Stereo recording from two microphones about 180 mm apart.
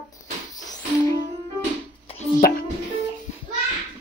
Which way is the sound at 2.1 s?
30° left (ahead or behind).